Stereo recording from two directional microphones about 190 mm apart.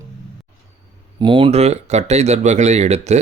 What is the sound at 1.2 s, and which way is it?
Speech, 25° right (ahead or behind).